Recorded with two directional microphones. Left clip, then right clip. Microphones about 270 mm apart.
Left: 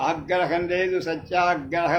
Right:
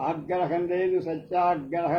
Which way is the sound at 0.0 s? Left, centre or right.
Left.